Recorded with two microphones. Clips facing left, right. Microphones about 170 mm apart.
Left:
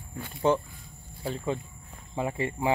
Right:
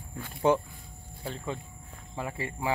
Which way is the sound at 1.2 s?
15° left (ahead or behind).